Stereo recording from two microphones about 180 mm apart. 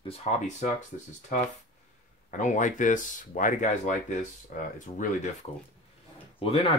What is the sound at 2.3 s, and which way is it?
Speech, 45° left (ahead or behind).